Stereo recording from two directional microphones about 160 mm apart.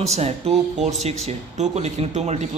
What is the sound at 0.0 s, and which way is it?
A man's voice, 40° right (ahead or behind).